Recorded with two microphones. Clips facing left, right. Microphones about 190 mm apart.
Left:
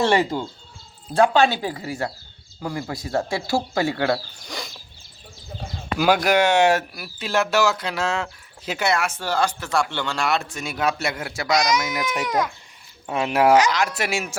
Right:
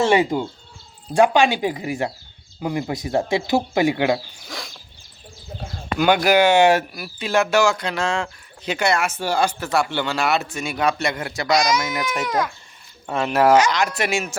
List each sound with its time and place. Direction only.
0.0 s speech: 15° right (ahead or behind)
4.4 s a sound: centre (ahead or behind)
5.6 s speech: centre (ahead or behind)
12.0 s speech: 15° left (ahead or behind)